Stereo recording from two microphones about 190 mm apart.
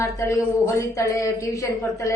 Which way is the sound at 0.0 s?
15° left (ahead or behind).